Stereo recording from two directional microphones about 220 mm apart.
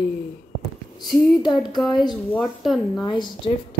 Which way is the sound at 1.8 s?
Centre (ahead or behind).